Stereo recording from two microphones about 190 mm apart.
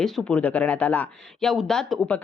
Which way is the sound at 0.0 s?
5° left (ahead or behind).